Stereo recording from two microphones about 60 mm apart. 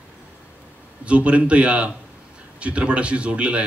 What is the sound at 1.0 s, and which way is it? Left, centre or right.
A man's voice, right.